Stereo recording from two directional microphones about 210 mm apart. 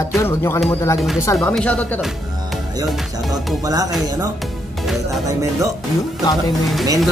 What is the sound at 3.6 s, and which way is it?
Speech, 15° right (ahead or behind).